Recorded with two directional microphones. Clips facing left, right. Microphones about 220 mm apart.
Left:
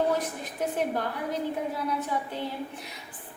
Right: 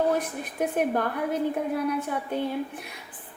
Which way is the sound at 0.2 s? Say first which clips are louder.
Right 3 dB; 55° right (ahead or behind).